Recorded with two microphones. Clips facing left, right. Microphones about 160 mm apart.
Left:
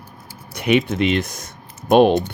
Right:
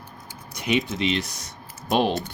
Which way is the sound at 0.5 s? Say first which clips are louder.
Left 7 dB; 60° left (ahead or behind).